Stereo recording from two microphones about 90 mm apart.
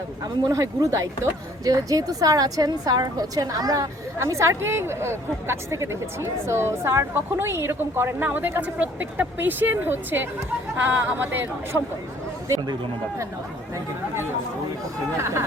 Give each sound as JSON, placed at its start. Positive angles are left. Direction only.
{"t": 0.4, "sound": "speech", "side_deg": -40}
{"t": 4.2, "sound": "a woman's voice", "side_deg": -35}
{"t": 15.2, "sound": "speech", "side_deg": -30}